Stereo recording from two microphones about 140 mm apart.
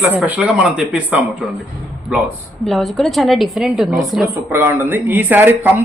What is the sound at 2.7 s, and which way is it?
A woman's voice, centre (ahead or behind).